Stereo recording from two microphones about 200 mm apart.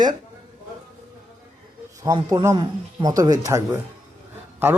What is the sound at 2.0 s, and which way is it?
Speech, 20° right (ahead or behind).